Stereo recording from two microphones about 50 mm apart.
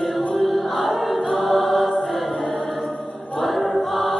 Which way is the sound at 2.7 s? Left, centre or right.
Centre.